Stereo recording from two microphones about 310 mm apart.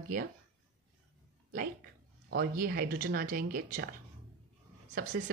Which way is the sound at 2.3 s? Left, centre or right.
Right.